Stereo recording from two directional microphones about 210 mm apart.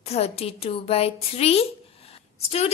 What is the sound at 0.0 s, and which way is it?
A woman's voice, 30° left (ahead or behind).